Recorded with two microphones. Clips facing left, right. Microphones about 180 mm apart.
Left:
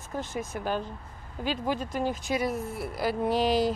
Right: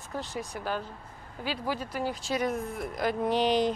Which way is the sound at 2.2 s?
5° left (ahead or behind).